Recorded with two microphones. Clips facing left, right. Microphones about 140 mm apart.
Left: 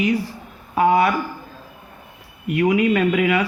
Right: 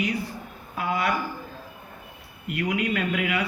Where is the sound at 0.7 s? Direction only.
75° left (ahead or behind).